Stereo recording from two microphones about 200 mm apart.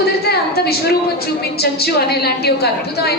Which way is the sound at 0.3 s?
50° left (ahead or behind).